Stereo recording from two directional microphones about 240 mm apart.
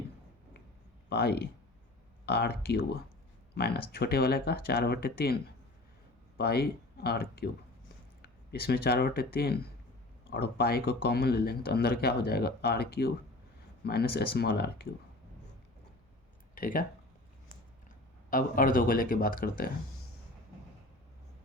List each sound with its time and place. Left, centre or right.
1.1 s speech: left
16.6 s speech: left
18.3 s speech: left